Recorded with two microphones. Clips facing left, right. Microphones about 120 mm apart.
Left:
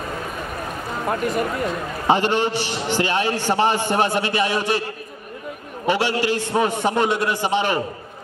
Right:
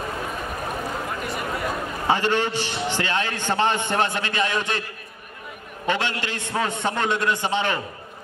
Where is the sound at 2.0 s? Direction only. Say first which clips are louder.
Left 3 dB; 15° left (ahead or behind).